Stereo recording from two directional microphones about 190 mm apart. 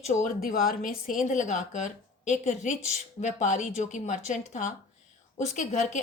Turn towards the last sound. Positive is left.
turn(degrees=40)  # may be behind; listen again after turning